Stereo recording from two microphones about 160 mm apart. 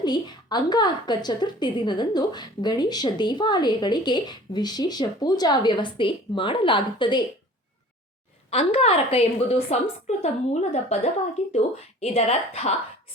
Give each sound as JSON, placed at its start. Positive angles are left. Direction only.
{"t": 0.0, "sound": "a woman's voice", "side_deg": 25}
{"t": 8.4, "sound": "a woman's voice", "side_deg": 40}